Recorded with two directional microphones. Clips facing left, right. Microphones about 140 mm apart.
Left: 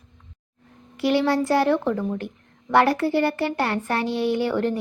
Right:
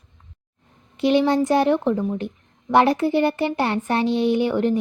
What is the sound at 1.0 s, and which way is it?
Speech, 20° right (ahead or behind).